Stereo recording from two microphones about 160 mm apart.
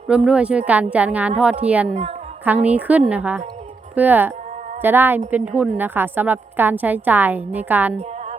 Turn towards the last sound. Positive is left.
turn(degrees=-10)  # may be behind; listen again after turning